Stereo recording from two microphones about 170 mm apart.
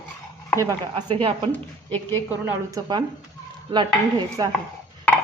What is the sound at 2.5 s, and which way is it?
Dishes, 20° right (ahead or behind).